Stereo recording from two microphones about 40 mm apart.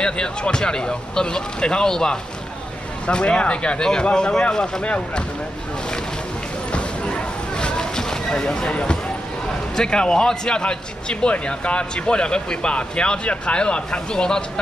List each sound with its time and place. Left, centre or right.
0.0 s a man's voice: left
4.8 s speech: left
6.7 s a sound: left
9.8 s a man's voice: centre